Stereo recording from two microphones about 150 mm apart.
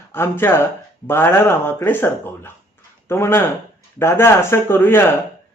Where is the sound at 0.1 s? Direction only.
15° left (ahead or behind).